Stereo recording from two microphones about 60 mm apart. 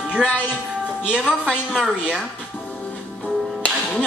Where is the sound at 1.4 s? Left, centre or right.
Centre.